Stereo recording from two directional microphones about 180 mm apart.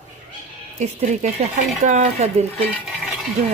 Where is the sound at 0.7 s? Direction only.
40° right (ahead or behind).